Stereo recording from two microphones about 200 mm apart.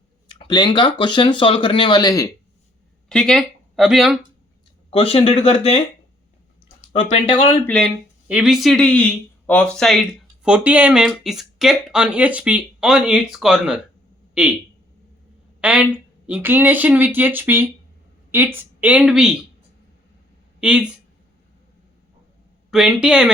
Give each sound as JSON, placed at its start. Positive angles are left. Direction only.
{"t": 0.3, "sound": "speech", "side_deg": 25}
{"t": 3.1, "sound": "speech", "side_deg": 5}
{"t": 4.9, "sound": "speech", "side_deg": 25}
{"t": 7.0, "sound": "speech", "side_deg": 30}
{"t": 8.3, "sound": "speech", "side_deg": -5}
{"t": 15.6, "sound": "a woman's voice", "side_deg": -5}
{"t": 20.6, "sound": "speech", "side_deg": -5}
{"t": 22.7, "sound": "speech", "side_deg": 0}